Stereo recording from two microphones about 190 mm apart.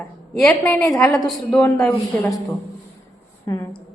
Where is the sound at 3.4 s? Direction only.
20° left (ahead or behind).